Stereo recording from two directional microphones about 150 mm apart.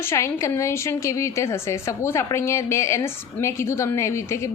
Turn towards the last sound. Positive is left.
turn(degrees=20)  # may be behind; listen again after turning